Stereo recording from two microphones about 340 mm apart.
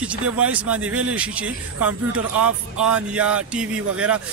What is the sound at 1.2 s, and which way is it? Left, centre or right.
Speech, centre.